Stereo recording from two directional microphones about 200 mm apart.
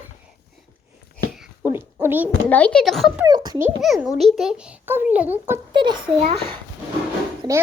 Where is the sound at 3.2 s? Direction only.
20° right (ahead or behind).